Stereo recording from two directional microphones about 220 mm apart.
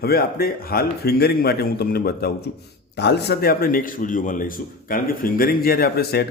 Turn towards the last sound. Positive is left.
turn(degrees=45)  # may be behind; listen again after turning